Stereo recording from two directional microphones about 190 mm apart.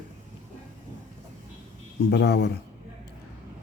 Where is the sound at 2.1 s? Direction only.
60° left (ahead or behind).